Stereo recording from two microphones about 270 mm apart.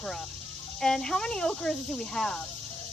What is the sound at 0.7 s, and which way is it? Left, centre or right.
Speech, centre.